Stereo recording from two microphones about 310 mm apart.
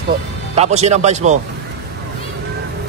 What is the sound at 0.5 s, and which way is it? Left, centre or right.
Speech, right.